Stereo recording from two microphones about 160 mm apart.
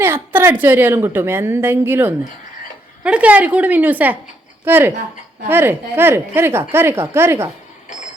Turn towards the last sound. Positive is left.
turn(degrees=-15)  # may be behind; listen again after turning